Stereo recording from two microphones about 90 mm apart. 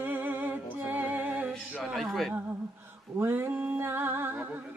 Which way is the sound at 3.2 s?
25° right (ahead or behind).